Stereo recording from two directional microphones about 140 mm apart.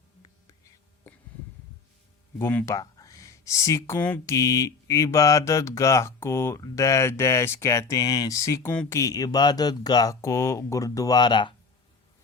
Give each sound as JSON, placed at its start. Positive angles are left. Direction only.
{"t": 2.4, "sound": "speech", "side_deg": 15}
{"t": 4.4, "sound": "speech", "side_deg": 25}